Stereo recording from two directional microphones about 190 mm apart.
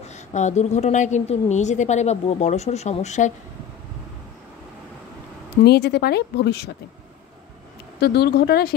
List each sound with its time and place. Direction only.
0.0 s a woman's voice: 35° left (ahead or behind)
5.6 s a woman's voice: 60° left (ahead or behind)
8.0 s a woman's voice: 55° left (ahead or behind)